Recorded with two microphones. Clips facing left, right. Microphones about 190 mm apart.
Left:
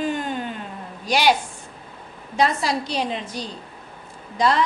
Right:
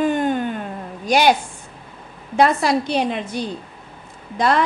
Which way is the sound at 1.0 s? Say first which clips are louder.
Right 3 dB; 50° right (ahead or behind).